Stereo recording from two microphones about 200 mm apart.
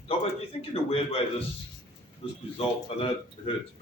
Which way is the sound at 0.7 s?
30° left (ahead or behind).